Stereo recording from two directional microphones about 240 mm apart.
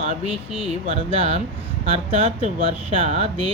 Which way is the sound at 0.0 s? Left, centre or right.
Right.